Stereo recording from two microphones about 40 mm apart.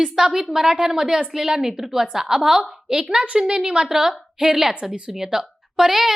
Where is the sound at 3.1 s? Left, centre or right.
Right; by 6.1 s centre.